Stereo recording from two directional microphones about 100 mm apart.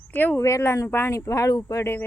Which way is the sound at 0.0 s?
15° left (ahead or behind).